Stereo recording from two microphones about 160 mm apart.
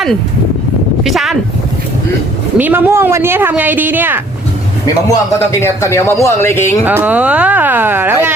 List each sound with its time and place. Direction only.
1.0 s speech: centre (ahead or behind)
2.6 s speech: 10° right (ahead or behind)
5.0 s speech: 20° left (ahead or behind)
6.8 s speech: 10° right (ahead or behind)